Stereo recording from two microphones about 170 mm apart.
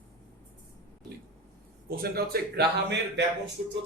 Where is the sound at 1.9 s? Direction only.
65° right (ahead or behind); by 3.2 s 80° right.